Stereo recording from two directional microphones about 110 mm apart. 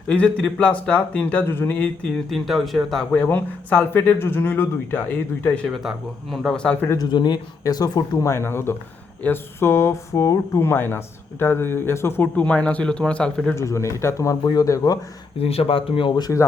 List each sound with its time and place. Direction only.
0.1 s speech: 10° left (ahead or behind)
2.3 s speech: centre (ahead or behind)
3.2 s speech: 15° left (ahead or behind)
5.6 s speech: centre (ahead or behind)
7.0 s speech: 40° left (ahead or behind)
8.3 s speech: 25° left (ahead or behind); by 13.6 s 5° left (ahead or behind)
13.6 s speech: 25° left (ahead or behind)
15.4 s speech: 65° left (ahead or behind); by 16.3 s 45° left (ahead or behind)